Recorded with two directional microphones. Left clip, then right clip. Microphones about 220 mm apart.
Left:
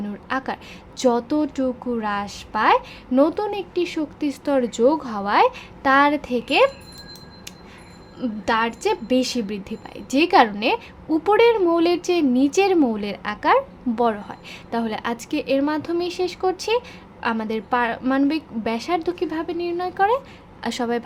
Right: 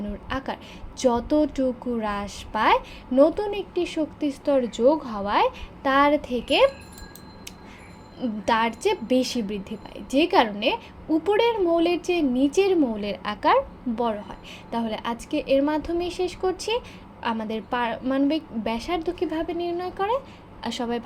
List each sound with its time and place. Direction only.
0.3 s a woman's voice: 15° left (ahead or behind)
8.2 s a woman's voice: 10° left (ahead or behind)